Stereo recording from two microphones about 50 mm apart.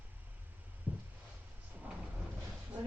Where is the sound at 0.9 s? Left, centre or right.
Right.